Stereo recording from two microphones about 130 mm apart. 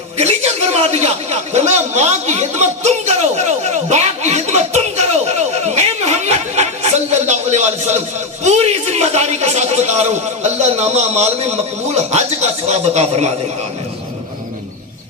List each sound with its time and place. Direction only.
0.2 s speech: 55° right (ahead or behind)
6.6 s a sound: 60° right (ahead or behind)
8.4 s a man's voice: 55° right (ahead or behind)